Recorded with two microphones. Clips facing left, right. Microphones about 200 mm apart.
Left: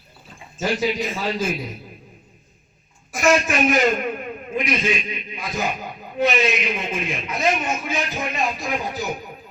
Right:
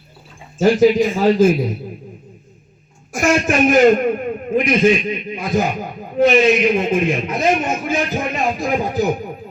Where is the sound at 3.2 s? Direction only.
50° right (ahead or behind).